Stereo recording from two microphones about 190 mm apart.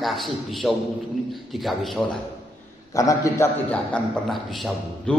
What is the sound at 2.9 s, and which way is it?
Speech, 15° left (ahead or behind).